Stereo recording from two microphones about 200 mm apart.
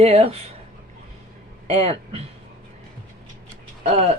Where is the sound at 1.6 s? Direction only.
30° right (ahead or behind).